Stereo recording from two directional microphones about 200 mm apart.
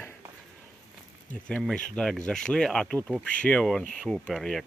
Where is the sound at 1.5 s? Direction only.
5° left (ahead or behind).